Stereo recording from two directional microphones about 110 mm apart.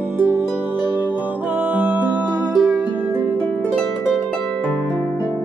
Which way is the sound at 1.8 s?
15° right (ahead or behind).